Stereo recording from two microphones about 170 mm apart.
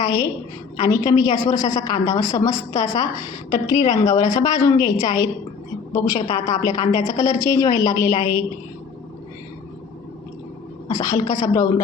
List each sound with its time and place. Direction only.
0.8 s a woman's voice: 20° left (ahead or behind)
10.8 s a woman's voice: 20° left (ahead or behind)